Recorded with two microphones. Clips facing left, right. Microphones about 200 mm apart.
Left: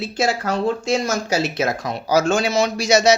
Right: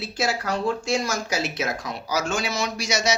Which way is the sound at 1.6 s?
50° left (ahead or behind).